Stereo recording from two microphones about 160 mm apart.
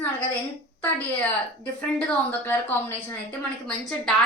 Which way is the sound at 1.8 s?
10° left (ahead or behind).